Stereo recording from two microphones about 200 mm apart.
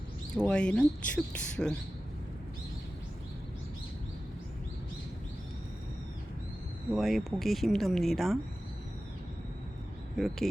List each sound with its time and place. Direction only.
0.3 s speech: 5° left (ahead or behind)
6.9 s speech: centre (ahead or behind)
10.2 s speech: centre (ahead or behind)